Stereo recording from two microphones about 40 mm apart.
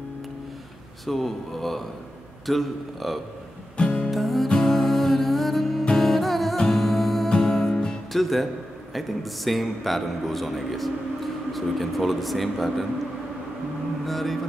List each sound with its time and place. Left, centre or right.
1.0 s a man's voice: centre
3.7 s music: left
4.1 s music: centre
7.4 s music: centre
8.1 s a man's voice: centre
14.0 s speech: centre